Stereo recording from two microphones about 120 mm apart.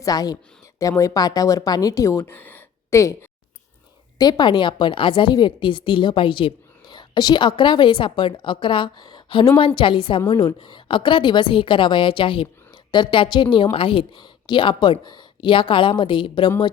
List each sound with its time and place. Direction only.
0.0 s speech: 30° left (ahead or behind)
4.2 s a woman's voice: 35° left (ahead or behind)